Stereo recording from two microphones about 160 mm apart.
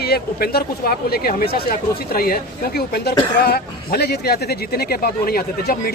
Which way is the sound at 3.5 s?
75° left (ahead or behind).